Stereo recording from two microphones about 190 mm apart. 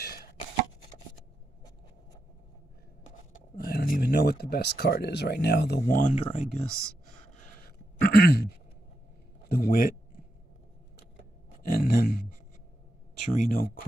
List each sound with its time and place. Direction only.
0.0 s chopping: 55° left (ahead or behind)
3.5 s speech: 50° left (ahead or behind); by 6.6 s 35° left (ahead or behind)
7.4 s a sound: 50° left (ahead or behind)
9.5 s speech: 50° left (ahead or behind)
11.7 s a sound: 50° left (ahead or behind)
13.3 s speech: 45° left (ahead or behind)